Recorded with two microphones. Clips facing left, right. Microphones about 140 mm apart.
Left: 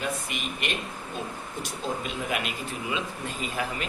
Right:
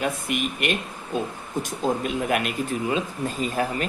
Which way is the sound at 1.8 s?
45° right (ahead or behind).